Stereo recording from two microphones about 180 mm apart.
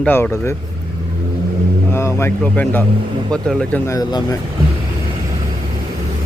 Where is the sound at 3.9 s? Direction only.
20° left (ahead or behind).